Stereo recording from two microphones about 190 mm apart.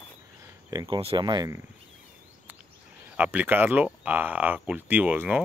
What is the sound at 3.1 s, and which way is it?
Speech, 10° right (ahead or behind).